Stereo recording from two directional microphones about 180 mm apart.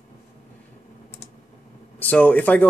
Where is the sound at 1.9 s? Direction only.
10° left (ahead or behind).